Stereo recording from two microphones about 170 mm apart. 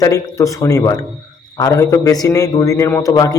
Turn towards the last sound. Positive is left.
turn(degrees=20)  # may be behind; listen again after turning